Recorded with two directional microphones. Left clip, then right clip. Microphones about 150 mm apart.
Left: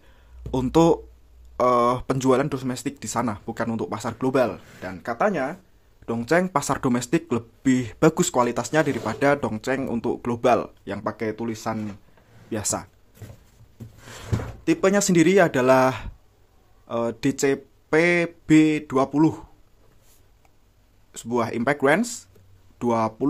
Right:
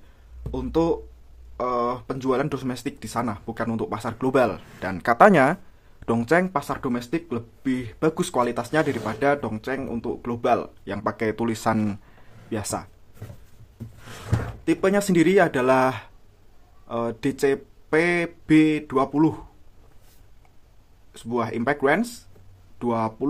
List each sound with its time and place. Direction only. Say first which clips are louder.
0.5 s speech: left 4 dB; 35° left (ahead or behind)
2.4 s speech: even; 10° left (ahead or behind)
5.0 s speech: right 8 dB; 25° right (ahead or behind)
6.2 s speech: even; centre (ahead or behind)
6.5 s speech: left 3 dB; 20° left (ahead or behind)
11.0 s speech: right 3 dB; centre (ahead or behind)
11.3 s speech: right 5 dB; 10° right (ahead or behind)
12.4 s speech: left 1 dB; 5° left (ahead or behind)
14.6 s speech: left 1 dB; 15° left (ahead or behind)
21.1 s speech: left 1 dB; 20° left (ahead or behind)